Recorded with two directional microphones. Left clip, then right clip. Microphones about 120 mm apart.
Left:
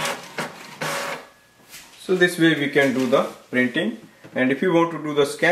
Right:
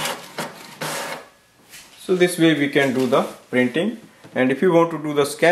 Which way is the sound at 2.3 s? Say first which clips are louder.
Right 1 dB; 30° right (ahead or behind).